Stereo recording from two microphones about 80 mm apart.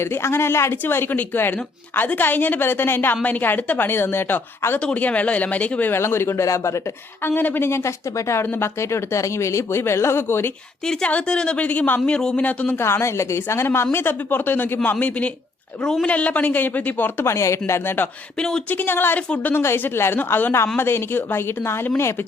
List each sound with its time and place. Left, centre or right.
0.0 s a woman's voice: left
4.8 s a man's voice: centre
5.9 s speech: left
7.3 s speech: left
10.8 s a man's voice: centre
12.8 s a woman's voice: left; by 15.3 s centre
15.8 s a woman's voice: centre
16.0 s a woman's voice: centre
17.2 s speech: left
18.3 s a man's voice: centre
18.7 s a woman's voice: left